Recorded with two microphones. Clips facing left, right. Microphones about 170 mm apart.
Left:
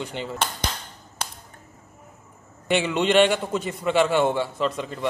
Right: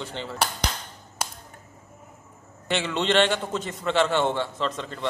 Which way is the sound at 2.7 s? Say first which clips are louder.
Left 3 dB; 10° left (ahead or behind).